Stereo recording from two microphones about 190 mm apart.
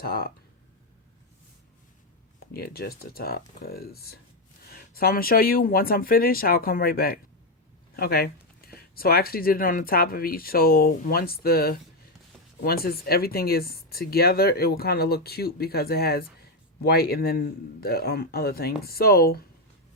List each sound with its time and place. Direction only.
0.0 s speech: 55° left (ahead or behind)
2.5 s speech: 55° left (ahead or behind)